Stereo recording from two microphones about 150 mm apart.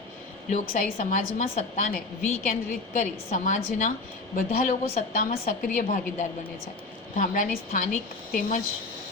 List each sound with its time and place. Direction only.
0.5 s a woman's voice: 65° left (ahead or behind)